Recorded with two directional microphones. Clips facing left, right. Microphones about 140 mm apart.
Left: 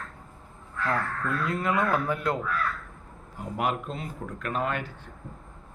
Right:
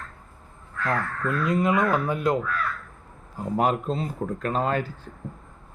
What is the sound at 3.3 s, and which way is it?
Speech, 35° right (ahead or behind).